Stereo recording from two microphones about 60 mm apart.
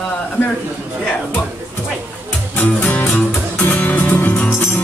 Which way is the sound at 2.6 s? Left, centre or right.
Left.